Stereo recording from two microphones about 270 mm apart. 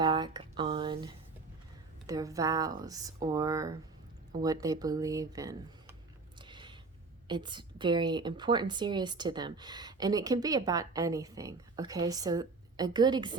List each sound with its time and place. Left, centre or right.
0.0 s a woman's voice: centre
6.4 s a sound: centre
7.3 s a woman's voice: centre